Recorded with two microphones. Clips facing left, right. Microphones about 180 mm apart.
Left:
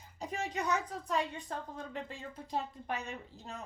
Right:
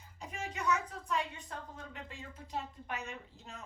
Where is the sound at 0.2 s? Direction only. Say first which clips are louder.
Left 5 dB; 35° left (ahead or behind).